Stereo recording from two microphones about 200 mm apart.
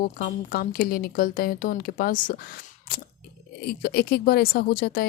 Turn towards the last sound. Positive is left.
turn(degrees=50)  # may be behind; listen again after turning